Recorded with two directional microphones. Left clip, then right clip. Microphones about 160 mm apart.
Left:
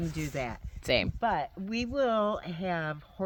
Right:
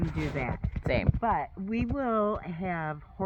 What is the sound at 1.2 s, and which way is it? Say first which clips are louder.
Speech: right 1 dB; 50° left (ahead or behind).